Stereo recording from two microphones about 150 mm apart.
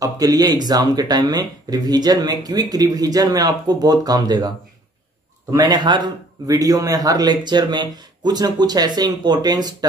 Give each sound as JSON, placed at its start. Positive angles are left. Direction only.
{"t": 0.0, "sound": "speech", "side_deg": -25}